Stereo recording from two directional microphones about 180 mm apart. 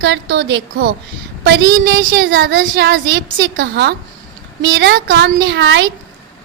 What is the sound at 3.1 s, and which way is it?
Speech, 70° right (ahead or behind).